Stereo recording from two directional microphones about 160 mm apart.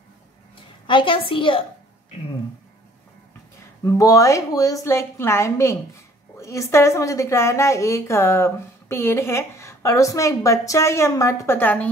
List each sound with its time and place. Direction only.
0.8 s a woman's voice: 30° left (ahead or behind)
3.8 s a woman's voice: 20° left (ahead or behind)